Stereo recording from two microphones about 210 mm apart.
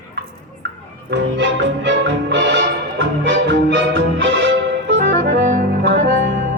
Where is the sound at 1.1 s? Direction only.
60° right (ahead or behind).